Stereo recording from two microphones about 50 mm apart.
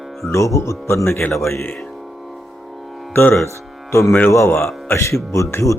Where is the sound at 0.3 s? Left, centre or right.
Left.